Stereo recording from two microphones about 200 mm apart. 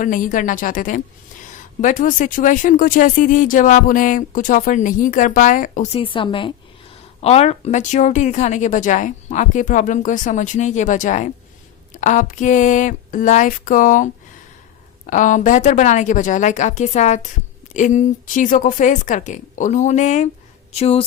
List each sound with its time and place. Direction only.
0.0 s speech: 40° left (ahead or behind)